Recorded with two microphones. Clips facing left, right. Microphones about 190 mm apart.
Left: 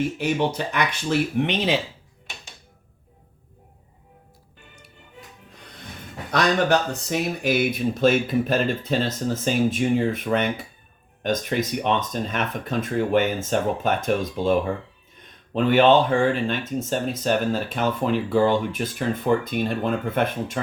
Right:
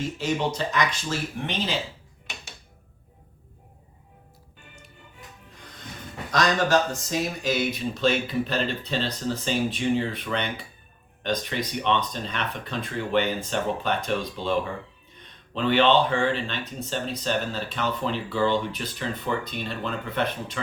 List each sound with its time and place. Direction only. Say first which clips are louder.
0.0 s speech: left 4 dB; 60° left (ahead or behind)
6.3 s speech: left 2 dB; 60° left (ahead or behind); by 14.5 s 45° left (ahead or behind)
15.5 s speech: left 4 dB; 45° left (ahead or behind)